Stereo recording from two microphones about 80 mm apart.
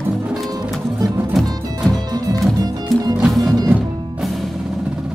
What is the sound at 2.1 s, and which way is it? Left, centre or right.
Music, right.